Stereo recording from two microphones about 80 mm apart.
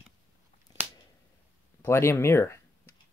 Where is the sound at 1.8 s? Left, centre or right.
Left.